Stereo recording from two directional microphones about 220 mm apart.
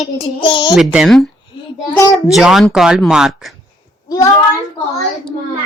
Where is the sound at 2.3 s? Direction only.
Centre (ahead or behind).